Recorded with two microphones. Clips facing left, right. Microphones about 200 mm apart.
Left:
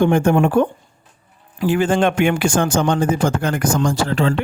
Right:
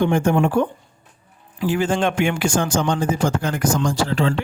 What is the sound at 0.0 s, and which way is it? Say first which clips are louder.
Speech: left 3 dB; 60° left (ahead or behind).